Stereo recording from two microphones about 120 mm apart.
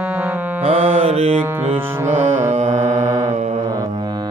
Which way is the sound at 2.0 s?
75° right (ahead or behind).